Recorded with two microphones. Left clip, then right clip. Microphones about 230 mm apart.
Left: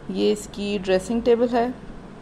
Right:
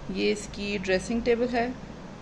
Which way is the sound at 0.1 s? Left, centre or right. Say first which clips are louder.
Left 5 dB; centre.